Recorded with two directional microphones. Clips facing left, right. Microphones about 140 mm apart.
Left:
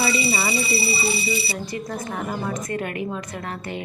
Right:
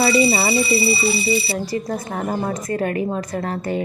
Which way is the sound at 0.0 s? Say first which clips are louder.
Right 7 dB; 45° right (ahead or behind).